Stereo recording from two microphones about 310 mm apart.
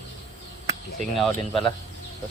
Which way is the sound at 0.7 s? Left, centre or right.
Centre.